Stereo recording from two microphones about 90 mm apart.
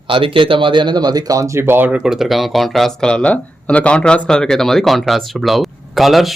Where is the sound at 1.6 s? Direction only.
20° right (ahead or behind).